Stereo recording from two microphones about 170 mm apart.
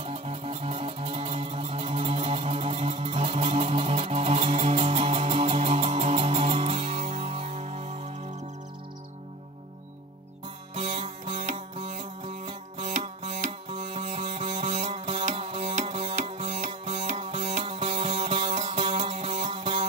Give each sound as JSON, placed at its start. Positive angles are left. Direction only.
{"t": 0.0, "sound": "music", "side_deg": -35}
{"t": 10.7, "sound": "music", "side_deg": -30}
{"t": 11.3, "sound": "music", "side_deg": -45}
{"t": 14.3, "sound": "music", "side_deg": -30}
{"t": 15.7, "sound": "music", "side_deg": -45}